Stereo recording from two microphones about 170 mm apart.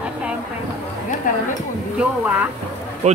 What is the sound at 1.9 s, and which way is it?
Speech, 10° right (ahead or behind).